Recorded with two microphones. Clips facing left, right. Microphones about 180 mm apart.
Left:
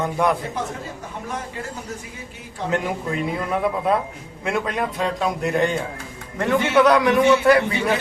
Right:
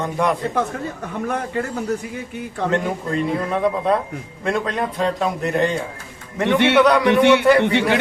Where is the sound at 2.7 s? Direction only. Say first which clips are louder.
Right 1 dB; 5° left (ahead or behind).